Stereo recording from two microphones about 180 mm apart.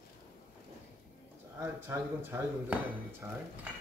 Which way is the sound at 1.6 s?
10° right (ahead or behind).